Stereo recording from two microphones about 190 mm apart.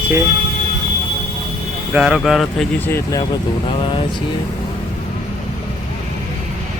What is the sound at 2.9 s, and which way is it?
Speech, 20° left (ahead or behind).